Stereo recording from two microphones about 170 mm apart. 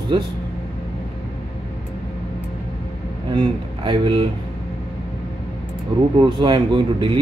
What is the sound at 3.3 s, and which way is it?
Speech, 30° right (ahead or behind).